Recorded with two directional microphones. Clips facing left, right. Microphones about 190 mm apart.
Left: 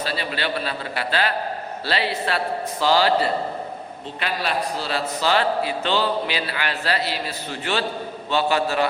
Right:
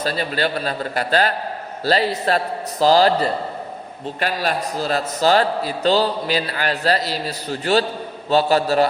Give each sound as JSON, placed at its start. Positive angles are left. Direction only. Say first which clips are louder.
{"t": 0.0, "sound": "a man's voice", "louder": "right 4 dB", "side_deg": -45}